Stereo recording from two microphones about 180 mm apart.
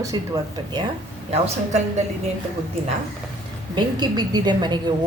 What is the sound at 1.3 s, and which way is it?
Speech, 40° right (ahead or behind).